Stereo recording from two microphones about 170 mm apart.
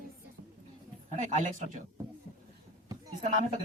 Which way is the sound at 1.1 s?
45° right (ahead or behind).